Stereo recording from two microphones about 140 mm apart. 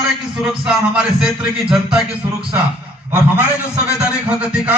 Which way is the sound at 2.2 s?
15° right (ahead or behind).